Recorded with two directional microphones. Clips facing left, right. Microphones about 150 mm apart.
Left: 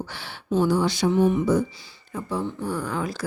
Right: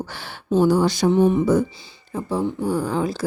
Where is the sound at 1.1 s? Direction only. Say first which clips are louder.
Right 3 dB; 25° right (ahead or behind).